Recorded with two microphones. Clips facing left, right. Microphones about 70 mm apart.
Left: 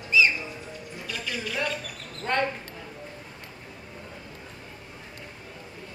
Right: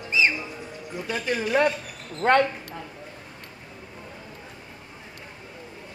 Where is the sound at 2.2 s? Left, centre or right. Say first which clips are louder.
Right 9 dB; right.